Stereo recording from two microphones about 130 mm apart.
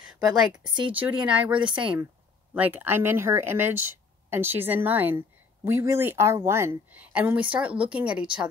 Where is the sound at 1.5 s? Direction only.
40° right (ahead or behind).